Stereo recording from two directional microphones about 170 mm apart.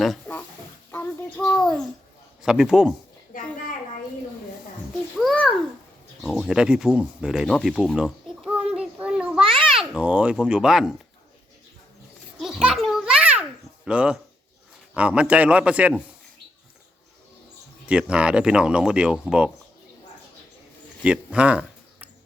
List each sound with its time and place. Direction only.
0.0 s pig: 5° left (ahead or behind)
0.9 s child singing: 10° left (ahead or behind)
1.4 s a child's voice: 5° left (ahead or behind)
3.3 s a sound: 55° left (ahead or behind)
5.1 s a sound: centre (ahead or behind)
9.5 s a child's voice: centre (ahead or behind)
12.4 s children playing: 5° right (ahead or behind)
13.8 s a man's voice: 5° right (ahead or behind)
17.8 s speech: 5° right (ahead or behind)
21.0 s a man's voice: 5° right (ahead or behind)